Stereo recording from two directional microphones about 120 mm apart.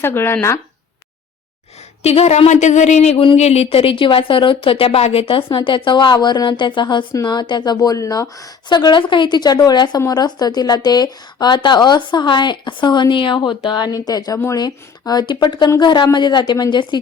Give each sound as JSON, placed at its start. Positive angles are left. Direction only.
{"t": 0.0, "sound": "speech", "side_deg": 20}
{"t": 2.0, "sound": "speech", "side_deg": 65}